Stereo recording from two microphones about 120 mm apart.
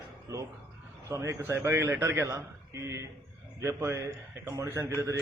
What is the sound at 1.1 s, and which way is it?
A man's voice, 25° right (ahead or behind).